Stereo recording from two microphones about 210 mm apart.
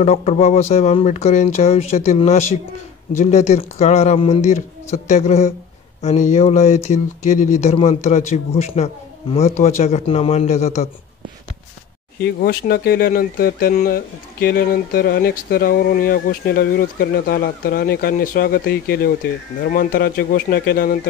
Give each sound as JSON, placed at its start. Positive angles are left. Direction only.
{"t": 0.0, "sound": "speech", "side_deg": 30}
{"t": 12.4, "sound": "speech", "side_deg": 50}